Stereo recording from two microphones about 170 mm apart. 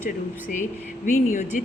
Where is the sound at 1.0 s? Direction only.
45° left (ahead or behind).